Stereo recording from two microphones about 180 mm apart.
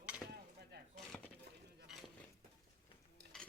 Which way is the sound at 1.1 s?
5° left (ahead or behind).